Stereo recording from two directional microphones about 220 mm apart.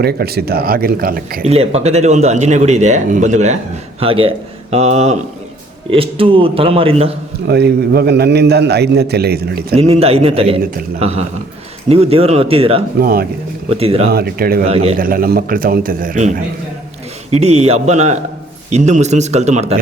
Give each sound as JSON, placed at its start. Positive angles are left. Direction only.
{"t": 0.0, "sound": "a man's voice", "side_deg": -45}
{"t": 1.5, "sound": "a man's voice", "side_deg": -30}
{"t": 7.4, "sound": "a man's voice", "side_deg": -50}
{"t": 9.7, "sound": "a man's voice", "side_deg": -25}
{"t": 11.9, "sound": "a man's voice", "side_deg": -25}
{"t": 13.0, "sound": "a man's voice", "side_deg": -45}
{"t": 13.7, "sound": "a man's voice", "side_deg": -25}
{"t": 14.1, "sound": "a man's voice", "side_deg": -45}
{"t": 14.7, "sound": "a man's voice", "side_deg": -30}
{"t": 14.9, "sound": "a man's voice", "side_deg": -40}